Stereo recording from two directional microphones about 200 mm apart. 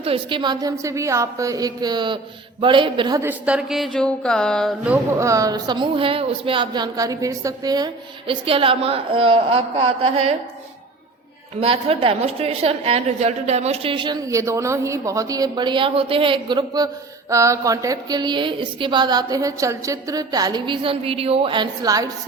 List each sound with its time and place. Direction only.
0.0 s a woman's voice: 25° right (ahead or behind)
3.2 s speech: 5° right (ahead or behind)
4.9 s a woman's voice: 15° right (ahead or behind)
11.6 s a woman's voice: 30° right (ahead or behind)